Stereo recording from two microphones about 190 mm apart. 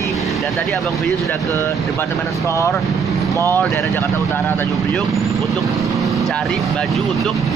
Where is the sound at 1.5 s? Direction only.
15° left (ahead or behind).